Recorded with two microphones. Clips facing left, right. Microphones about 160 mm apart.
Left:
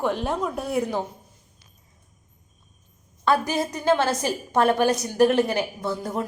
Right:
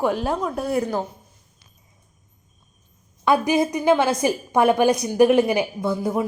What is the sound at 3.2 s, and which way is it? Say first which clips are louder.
A woman's voice: right 4 dB; 15° right (ahead or behind).